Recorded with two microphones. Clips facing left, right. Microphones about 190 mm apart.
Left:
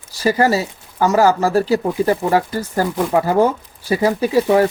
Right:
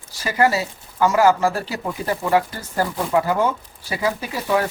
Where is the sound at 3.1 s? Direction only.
40° left (ahead or behind).